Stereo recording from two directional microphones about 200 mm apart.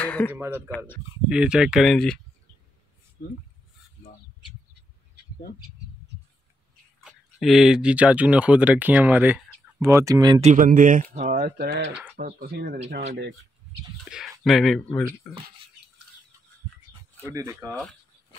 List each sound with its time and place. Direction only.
0.0 s a sound: 5° left (ahead or behind)
0.3 s speech: 10° right (ahead or behind)
0.7 s speech: 10° left (ahead or behind)
1.3 s speech: 5° right (ahead or behind)
3.2 s speech: 45° left (ahead or behind)
7.1 s speech: centre (ahead or behind); by 10.4 s 20° right (ahead or behind)
10.4 s speech: 40° right (ahead or behind)
11.4 s speech: 50° right (ahead or behind)
11.9 s a sound: 5° right (ahead or behind)
12.2 s speech: 45° right (ahead or behind)
14.1 s speech: centre (ahead or behind)
17.3 s speech: 15° right (ahead or behind)
17.6 s speech: centre (ahead or behind)